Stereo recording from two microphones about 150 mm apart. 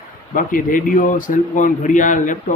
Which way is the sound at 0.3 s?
65° left (ahead or behind).